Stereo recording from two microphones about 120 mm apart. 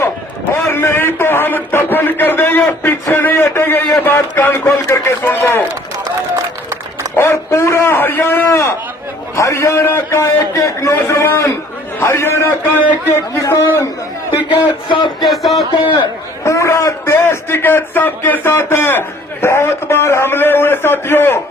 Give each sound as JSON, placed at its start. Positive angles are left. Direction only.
{"t": 0.7, "sound": "a man's voice", "side_deg": 20}
{"t": 7.2, "sound": "a man's voice", "side_deg": 20}
{"t": 14.8, "sound": "a sound", "side_deg": 45}
{"t": 15.3, "sound": "music", "side_deg": 0}
{"t": 16.4, "sound": "a man's voice", "side_deg": 20}